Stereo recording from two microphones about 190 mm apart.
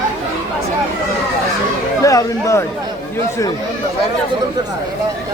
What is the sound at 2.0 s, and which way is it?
Speech, 15° left (ahead or behind).